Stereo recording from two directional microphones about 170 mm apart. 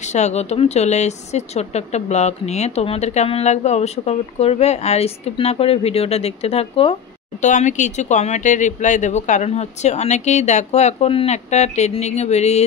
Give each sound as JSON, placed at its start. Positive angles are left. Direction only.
{"t": 0.1, "sound": "a woman's voice", "side_deg": 40}
{"t": 7.4, "sound": "a woman's voice", "side_deg": 45}